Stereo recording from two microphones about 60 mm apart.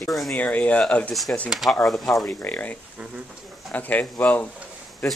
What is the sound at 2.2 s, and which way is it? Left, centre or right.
Speech, left.